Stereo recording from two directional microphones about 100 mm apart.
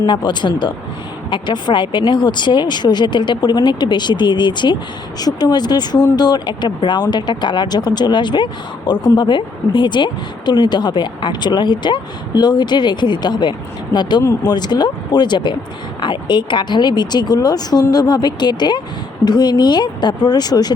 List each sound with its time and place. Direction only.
0.0 s speech: 50° left (ahead or behind)